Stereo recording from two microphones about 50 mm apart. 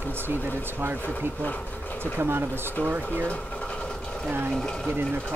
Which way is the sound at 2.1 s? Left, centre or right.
Right.